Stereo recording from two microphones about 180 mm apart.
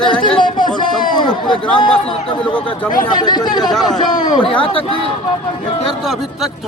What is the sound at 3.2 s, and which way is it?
A man's voice, 25° left (ahead or behind).